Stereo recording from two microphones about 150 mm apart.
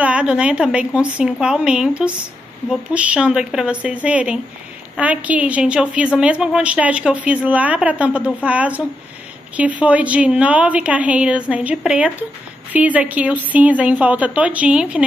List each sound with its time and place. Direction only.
0.0 s a woman's voice: 10° right (ahead or behind)